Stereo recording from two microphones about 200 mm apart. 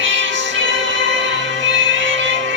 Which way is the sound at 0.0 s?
70° right (ahead or behind).